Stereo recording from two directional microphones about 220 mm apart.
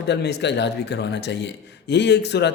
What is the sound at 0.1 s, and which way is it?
Speech, 50° left (ahead or behind).